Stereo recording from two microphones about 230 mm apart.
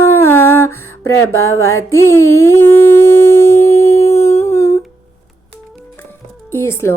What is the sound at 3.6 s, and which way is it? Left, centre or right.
Music, left.